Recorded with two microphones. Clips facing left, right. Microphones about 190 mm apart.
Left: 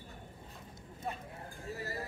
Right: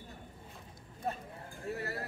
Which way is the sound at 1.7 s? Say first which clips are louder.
Right 4 dB; 65° right (ahead or behind).